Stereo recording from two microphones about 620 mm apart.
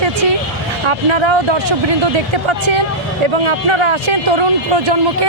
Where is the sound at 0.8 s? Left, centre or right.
Right.